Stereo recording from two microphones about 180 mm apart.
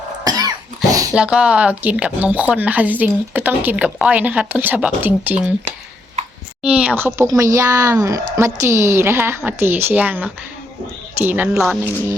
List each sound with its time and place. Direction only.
0.3 s cough: 20° right (ahead or behind)
0.9 s dog: 20° right (ahead or behind)
1.1 s a woman's voice: 5° right (ahead or behind)
6.6 s a woman's voice: 5° right (ahead or behind)